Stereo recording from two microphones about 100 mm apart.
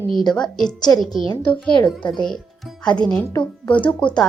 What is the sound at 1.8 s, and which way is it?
Speech, 50° left (ahead or behind).